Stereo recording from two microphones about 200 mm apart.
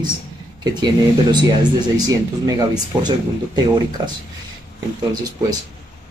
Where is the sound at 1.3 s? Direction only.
20° right (ahead or behind).